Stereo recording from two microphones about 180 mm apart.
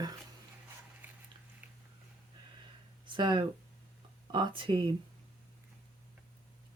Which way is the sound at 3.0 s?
25° right (ahead or behind).